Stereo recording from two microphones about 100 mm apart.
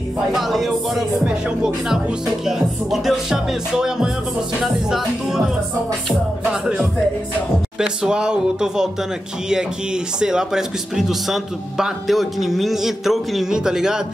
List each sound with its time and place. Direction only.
0.3 s music: centre (ahead or behind)
6.0 s speech: 5° right (ahead or behind)
10.2 s music: 5° right (ahead or behind)